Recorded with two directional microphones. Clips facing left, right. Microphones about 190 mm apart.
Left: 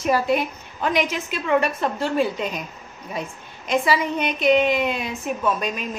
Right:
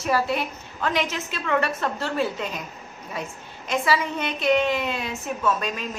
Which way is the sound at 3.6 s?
15° left (ahead or behind).